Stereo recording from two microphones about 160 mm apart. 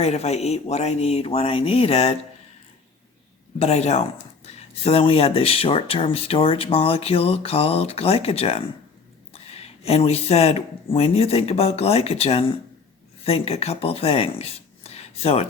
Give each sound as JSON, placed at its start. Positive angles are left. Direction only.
{"t": 0.0, "sound": "speech", "side_deg": 40}
{"t": 3.6, "sound": "speech", "side_deg": 40}